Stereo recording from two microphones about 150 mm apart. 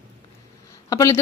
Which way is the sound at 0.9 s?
25° left (ahead or behind).